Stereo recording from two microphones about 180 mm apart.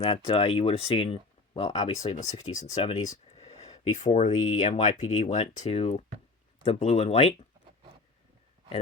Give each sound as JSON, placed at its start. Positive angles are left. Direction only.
{"t": 0.0, "sound": "speech", "side_deg": 30}